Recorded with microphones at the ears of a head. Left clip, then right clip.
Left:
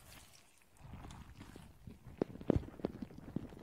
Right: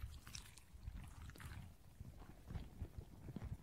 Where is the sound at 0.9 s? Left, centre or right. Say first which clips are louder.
Left 6 dB; left.